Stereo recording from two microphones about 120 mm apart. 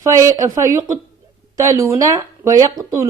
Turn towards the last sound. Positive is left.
turn(degrees=-25)  # may be behind; listen again after turning